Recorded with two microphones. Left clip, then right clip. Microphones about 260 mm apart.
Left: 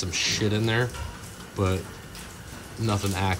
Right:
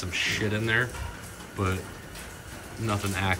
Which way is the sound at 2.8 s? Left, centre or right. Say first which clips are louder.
Left 1 dB; centre.